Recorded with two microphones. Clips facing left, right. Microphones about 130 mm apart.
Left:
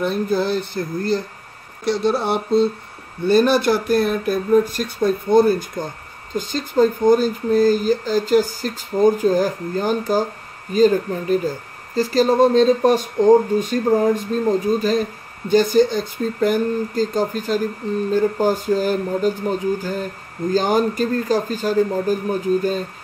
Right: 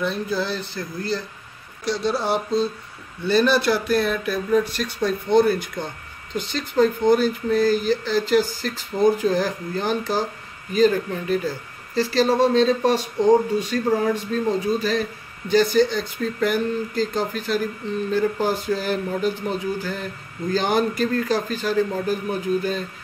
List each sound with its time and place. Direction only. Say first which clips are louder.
0.0 s speech: left 5 dB; 45° left (ahead or behind)
1.9 s a sound: left 3 dB; 55° left (ahead or behind)
3.3 s a man's voice: left 3 dB; 45° left (ahead or behind)